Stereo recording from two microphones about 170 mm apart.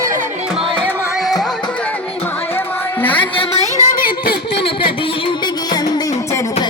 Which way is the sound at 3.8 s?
55° left (ahead or behind).